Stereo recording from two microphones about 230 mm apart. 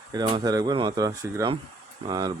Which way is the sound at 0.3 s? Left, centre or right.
Centre.